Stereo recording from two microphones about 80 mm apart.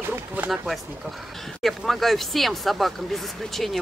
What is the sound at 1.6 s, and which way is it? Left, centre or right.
Speech, centre.